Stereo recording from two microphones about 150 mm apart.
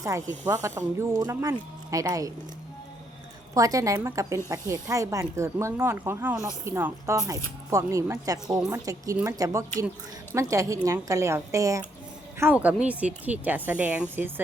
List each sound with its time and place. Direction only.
0.0 s speech: 20° right (ahead or behind)
3.5 s speech: 25° right (ahead or behind)